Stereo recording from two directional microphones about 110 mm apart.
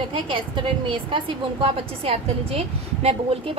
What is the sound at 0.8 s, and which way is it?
A woman's voice, 50° right (ahead or behind).